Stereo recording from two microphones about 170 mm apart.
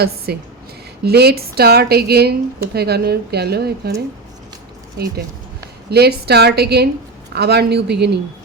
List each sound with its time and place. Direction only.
0.3 s a woman's voice: 70° right (ahead or behind)
5.9 s a woman's voice: 70° right (ahead or behind)